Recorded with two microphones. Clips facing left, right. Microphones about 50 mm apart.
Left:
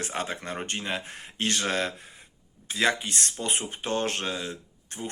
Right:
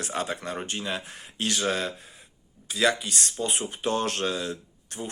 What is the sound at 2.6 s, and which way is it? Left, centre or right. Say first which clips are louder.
Speech: right 1 dB; left.